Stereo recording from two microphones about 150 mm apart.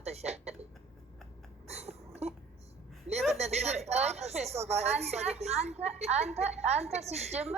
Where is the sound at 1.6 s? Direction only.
45° right (ahead or behind).